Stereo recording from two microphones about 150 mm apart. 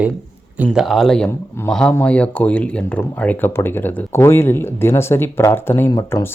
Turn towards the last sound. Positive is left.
turn(degrees=20)  # may be behind; listen again after turning